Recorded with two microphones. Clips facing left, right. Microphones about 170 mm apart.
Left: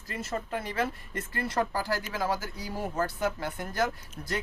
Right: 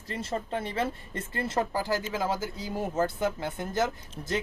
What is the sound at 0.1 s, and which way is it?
Speech, 30° right (ahead or behind).